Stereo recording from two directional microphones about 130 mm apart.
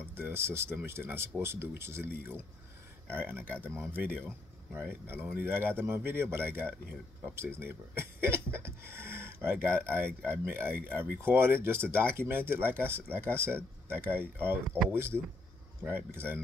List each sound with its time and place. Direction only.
0.1 s speech: 20° right (ahead or behind)